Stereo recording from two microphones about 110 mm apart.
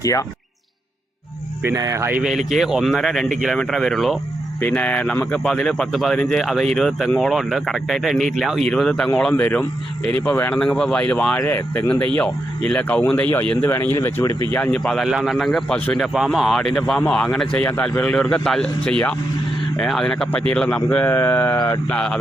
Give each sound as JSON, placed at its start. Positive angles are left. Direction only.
{"t": 0.0, "sound": "speech", "side_deg": 30}
{"t": 1.7, "sound": "speech", "side_deg": -30}
{"t": 2.6, "sound": "speech", "side_deg": 0}
{"t": 4.6, "sound": "a man's voice", "side_deg": 15}
{"t": 11.4, "sound": "a man's voice", "side_deg": 20}
{"t": 14.5, "sound": "a man's voice", "side_deg": 10}